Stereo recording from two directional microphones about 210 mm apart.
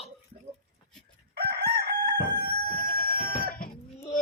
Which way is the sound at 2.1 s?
45° left (ahead or behind).